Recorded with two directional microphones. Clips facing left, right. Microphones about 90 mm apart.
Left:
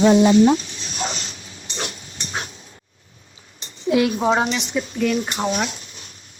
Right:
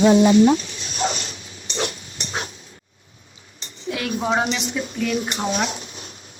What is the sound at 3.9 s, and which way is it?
Speech, 20° left (ahead or behind).